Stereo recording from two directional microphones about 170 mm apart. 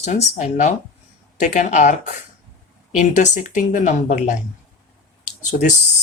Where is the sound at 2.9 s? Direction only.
45° left (ahead or behind).